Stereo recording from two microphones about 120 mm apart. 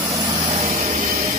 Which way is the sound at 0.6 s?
75° right (ahead or behind).